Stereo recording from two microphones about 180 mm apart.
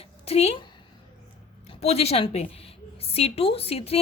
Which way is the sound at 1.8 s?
35° left (ahead or behind).